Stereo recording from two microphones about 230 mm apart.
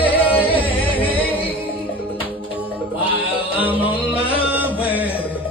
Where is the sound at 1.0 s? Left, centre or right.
Centre.